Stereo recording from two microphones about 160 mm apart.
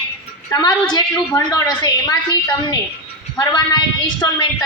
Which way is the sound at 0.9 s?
25° left (ahead or behind).